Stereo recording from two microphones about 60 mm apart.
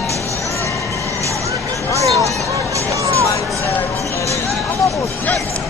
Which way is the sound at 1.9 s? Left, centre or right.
Right.